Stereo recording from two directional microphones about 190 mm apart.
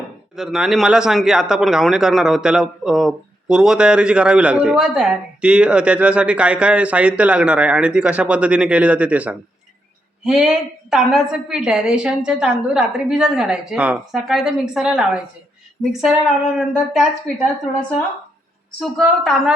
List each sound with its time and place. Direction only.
0.3 s a man's voice: centre (ahead or behind)
19.2 s a man's voice: centre (ahead or behind)